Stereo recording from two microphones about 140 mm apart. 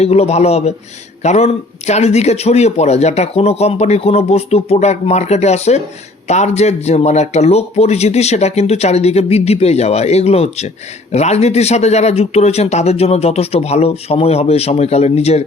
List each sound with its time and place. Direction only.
0.0 s a man's voice: 50° left (ahead or behind)